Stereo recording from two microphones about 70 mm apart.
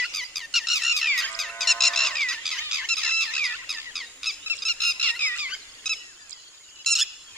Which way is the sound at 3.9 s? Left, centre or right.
Centre.